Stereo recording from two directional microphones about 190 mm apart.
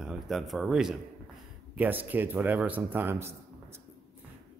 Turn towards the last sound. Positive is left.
turn(degrees=-15)  # may be behind; listen again after turning